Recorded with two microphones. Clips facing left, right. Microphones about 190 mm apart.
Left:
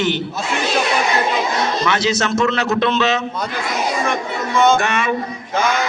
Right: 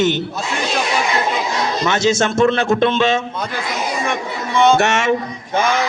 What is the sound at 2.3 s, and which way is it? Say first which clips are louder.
Speech: right 3 dB; 50° right (ahead or behind).